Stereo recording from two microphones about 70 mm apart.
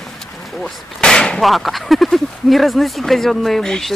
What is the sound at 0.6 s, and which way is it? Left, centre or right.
Artillery fire, centre.